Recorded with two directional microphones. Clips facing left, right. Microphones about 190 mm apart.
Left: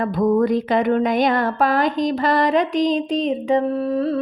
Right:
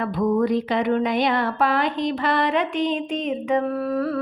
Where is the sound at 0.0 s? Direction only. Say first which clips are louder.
Left 3 dB; 45° left (ahead or behind).